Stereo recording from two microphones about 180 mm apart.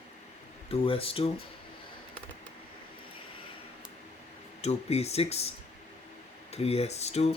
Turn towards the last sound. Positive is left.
turn(degrees=35)  # may be behind; listen again after turning